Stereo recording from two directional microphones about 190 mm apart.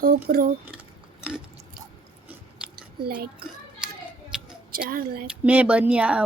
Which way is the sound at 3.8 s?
5° right (ahead or behind).